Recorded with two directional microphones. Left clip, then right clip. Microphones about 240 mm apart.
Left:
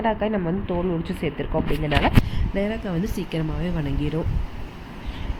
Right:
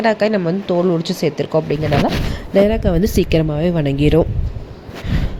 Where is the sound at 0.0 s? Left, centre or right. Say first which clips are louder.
Right 8 dB; centre.